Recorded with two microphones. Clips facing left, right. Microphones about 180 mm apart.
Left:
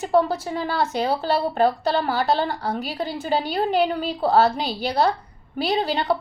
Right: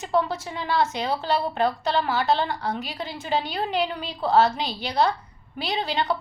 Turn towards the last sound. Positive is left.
turn(degrees=35)  # may be behind; listen again after turning